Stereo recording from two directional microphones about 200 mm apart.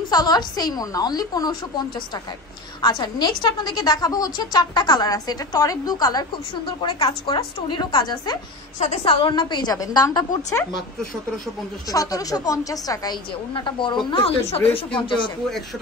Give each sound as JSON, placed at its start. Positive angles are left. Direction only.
{"t": 0.1, "sound": "a woman's voice", "side_deg": 20}
{"t": 2.8, "sound": "a woman's voice", "side_deg": 20}
{"t": 8.7, "sound": "a woman's voice", "side_deg": 35}
{"t": 11.9, "sound": "a woman's voice", "side_deg": 15}